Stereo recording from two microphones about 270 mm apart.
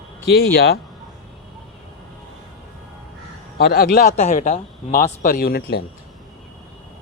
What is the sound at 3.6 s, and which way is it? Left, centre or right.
Speech, left.